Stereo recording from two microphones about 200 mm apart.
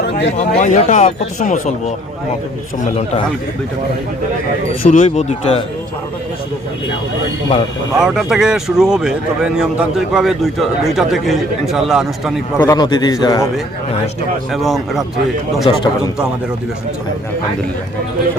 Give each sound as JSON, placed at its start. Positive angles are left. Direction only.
{"t": 0.3, "sound": "speech", "side_deg": 35}
{"t": 4.8, "sound": "speech", "side_deg": 40}
{"t": 7.9, "sound": "speech", "side_deg": -5}
{"t": 12.5, "sound": "a man's voice", "side_deg": 20}
{"t": 14.5, "sound": "speech", "side_deg": 0}
{"t": 15.7, "sound": "a man's voice", "side_deg": 25}